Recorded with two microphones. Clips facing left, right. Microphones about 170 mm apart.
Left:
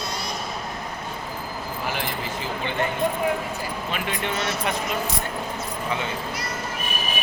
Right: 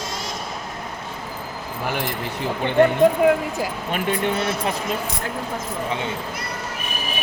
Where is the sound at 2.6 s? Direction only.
55° right (ahead or behind).